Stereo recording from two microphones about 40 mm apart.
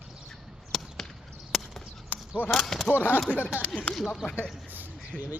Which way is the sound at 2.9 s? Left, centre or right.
Left.